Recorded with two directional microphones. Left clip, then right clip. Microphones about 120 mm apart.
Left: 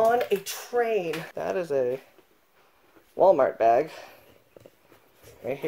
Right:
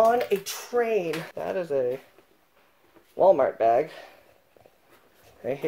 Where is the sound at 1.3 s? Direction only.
55° left (ahead or behind).